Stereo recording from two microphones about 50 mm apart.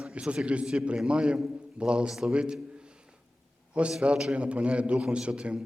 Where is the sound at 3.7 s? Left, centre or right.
Right.